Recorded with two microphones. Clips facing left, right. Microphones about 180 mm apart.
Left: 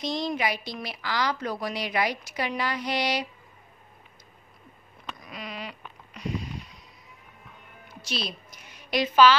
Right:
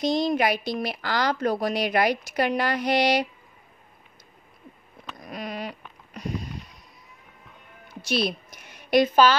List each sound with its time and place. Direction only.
0.3 s a woman's voice: 55° right (ahead or behind)
5.2 s a sound: 45° right (ahead or behind)
8.1 s a woman's voice: 60° right (ahead or behind)